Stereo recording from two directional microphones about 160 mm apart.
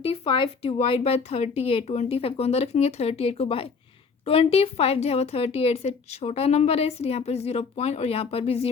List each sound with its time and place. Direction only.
0.0 s a woman's voice: 35° left (ahead or behind)